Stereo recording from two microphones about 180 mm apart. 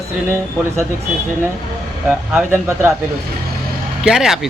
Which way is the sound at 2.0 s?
10° right (ahead or behind).